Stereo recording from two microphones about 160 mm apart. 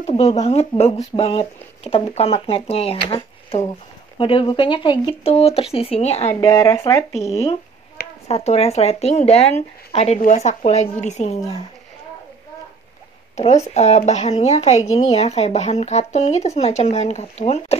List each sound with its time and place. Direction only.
0.0 s speech: 40° left (ahead or behind)
6.4 s speech: 20° left (ahead or behind)
8.3 s speech: 40° left (ahead or behind)
13.7 s speech: 45° left (ahead or behind)